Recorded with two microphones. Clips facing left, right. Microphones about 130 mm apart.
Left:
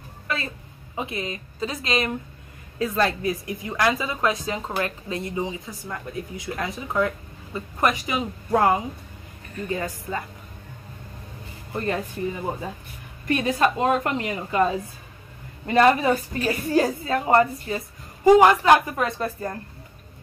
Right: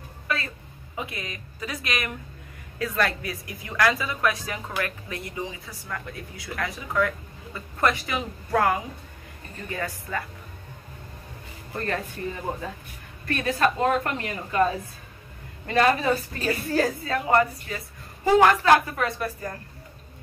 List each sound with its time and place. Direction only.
0.9 s a woman's voice: 25° left (ahead or behind)
11.7 s speech: 20° left (ahead or behind)
13.2 s a woman's voice: 20° left (ahead or behind)
17.1 s a woman's voice: 30° left (ahead or behind)
18.2 s a woman's voice: 15° left (ahead or behind)